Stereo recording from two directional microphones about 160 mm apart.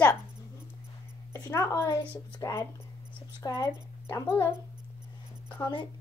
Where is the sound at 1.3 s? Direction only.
20° left (ahead or behind).